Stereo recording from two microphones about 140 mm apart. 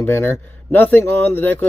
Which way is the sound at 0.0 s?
15° left (ahead or behind).